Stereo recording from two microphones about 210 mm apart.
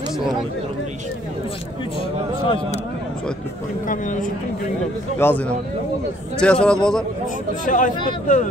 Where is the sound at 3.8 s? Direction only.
40° left (ahead or behind).